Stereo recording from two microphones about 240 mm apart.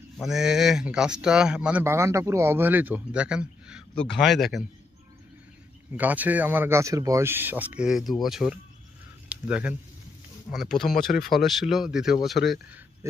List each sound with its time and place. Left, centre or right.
0.2 s speech: centre
5.9 s speech: centre
10.8 s speech: left
11.4 s speech: centre